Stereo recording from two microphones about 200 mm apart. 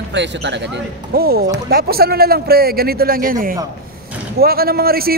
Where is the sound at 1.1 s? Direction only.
50° right (ahead or behind).